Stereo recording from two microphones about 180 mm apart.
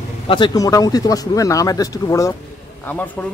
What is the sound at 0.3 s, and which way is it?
Speech, 20° left (ahead or behind).